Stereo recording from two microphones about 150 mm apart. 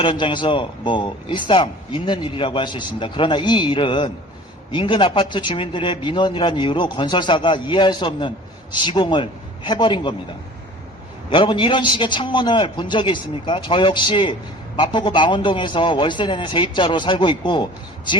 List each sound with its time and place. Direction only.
0.0 s speech: 35° left (ahead or behind)
11.3 s speech: 35° left (ahead or behind)